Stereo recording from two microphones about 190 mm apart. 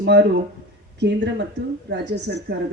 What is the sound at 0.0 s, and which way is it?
Speech, 65° right (ahead or behind).